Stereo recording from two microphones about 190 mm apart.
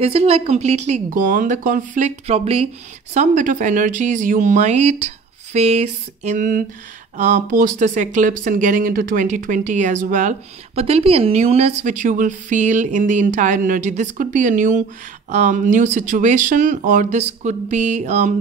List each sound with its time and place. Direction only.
0.0 s speech: 30° right (ahead or behind)